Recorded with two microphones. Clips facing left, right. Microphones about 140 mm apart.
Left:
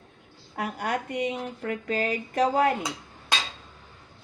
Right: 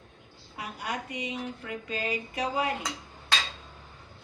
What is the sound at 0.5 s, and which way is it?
Speech, 55° left (ahead or behind).